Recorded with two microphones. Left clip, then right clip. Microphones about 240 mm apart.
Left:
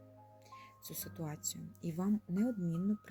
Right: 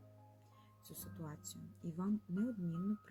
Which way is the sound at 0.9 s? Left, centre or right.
Left.